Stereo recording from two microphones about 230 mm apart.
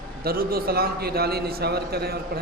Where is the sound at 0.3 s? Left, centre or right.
Right.